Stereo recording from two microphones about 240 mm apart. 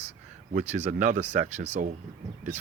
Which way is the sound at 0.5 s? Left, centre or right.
Right.